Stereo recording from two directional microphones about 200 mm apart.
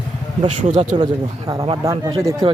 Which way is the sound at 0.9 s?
20° right (ahead or behind).